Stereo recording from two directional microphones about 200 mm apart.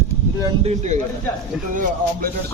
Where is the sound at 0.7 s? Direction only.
35° right (ahead or behind).